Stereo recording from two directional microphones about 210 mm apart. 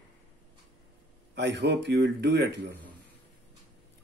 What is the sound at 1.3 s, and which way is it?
Speech, 55° right (ahead or behind).